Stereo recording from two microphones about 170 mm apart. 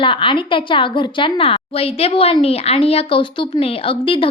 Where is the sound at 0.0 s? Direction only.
30° left (ahead or behind).